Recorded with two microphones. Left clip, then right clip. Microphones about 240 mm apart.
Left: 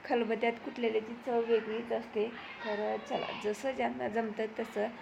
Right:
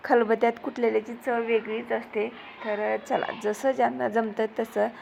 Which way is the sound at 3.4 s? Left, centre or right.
Right.